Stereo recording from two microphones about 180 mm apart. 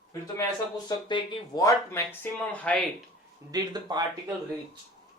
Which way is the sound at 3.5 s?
20° right (ahead or behind).